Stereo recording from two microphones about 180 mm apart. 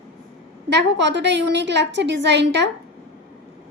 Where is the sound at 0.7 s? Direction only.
75° right (ahead or behind).